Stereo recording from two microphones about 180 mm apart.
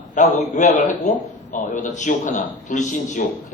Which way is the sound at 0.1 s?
40° left (ahead or behind).